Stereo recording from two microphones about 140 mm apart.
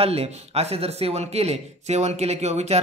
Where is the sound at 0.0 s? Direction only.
45° right (ahead or behind).